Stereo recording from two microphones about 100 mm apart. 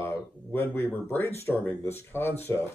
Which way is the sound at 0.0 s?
20° left (ahead or behind).